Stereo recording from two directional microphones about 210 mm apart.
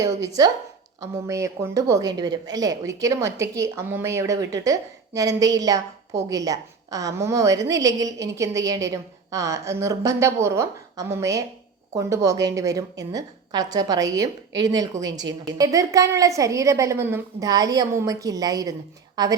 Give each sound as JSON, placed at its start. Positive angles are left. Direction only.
{"t": 0.0, "sound": "speech", "side_deg": -15}